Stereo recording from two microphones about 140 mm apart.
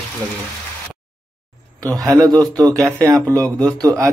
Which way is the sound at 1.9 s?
25° right (ahead or behind).